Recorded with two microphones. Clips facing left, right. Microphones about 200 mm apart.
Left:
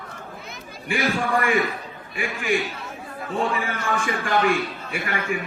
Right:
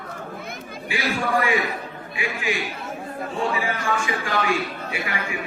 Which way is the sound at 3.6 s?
50° left (ahead or behind).